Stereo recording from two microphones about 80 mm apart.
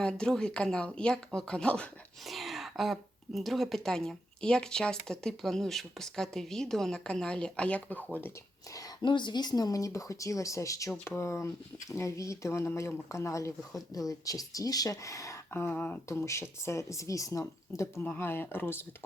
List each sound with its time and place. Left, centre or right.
0.0 s a woman's voice: centre
2.2 s a woman's voice: centre; by 8.3 s left
9.0 s speech: left
15.5 s speech: left
18.0 s speech: left